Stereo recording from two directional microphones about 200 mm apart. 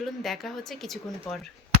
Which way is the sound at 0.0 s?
Centre (ahead or behind).